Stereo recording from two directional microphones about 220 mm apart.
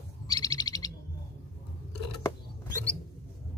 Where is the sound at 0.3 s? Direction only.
15° left (ahead or behind).